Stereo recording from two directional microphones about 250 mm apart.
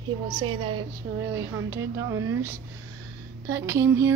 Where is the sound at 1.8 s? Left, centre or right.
Right.